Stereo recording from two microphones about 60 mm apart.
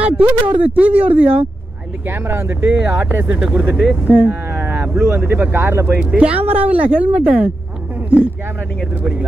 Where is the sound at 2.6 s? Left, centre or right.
Right.